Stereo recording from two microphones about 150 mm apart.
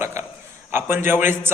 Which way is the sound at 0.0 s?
20° right (ahead or behind).